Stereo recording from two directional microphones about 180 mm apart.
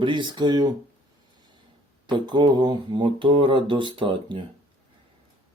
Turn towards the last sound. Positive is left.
turn(degrees=-25)  # may be behind; listen again after turning